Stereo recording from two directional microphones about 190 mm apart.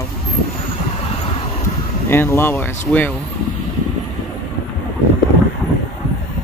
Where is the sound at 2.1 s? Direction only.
10° left (ahead or behind).